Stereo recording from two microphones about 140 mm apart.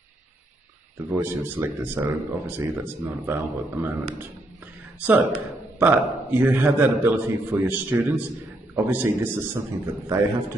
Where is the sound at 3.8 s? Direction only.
15° right (ahead or behind).